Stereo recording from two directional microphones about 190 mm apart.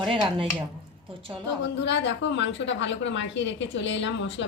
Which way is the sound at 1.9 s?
70° left (ahead or behind).